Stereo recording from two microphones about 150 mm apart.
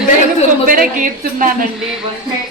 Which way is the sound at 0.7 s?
65° right (ahead or behind).